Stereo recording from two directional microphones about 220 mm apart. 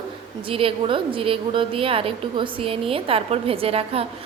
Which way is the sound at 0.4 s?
25° right (ahead or behind).